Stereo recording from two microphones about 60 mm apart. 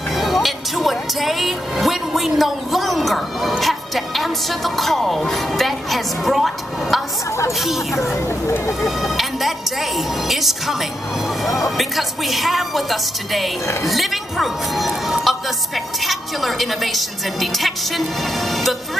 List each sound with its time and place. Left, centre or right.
0.1 s speech: centre
7.2 s speech: left
7.5 s a woman's voice: centre
8.2 s speech: left
8.8 s a woman's voice: centre